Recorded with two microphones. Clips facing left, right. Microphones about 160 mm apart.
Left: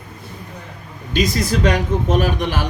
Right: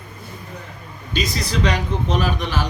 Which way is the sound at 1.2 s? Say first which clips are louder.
Left 4 dB; 45° left (ahead or behind).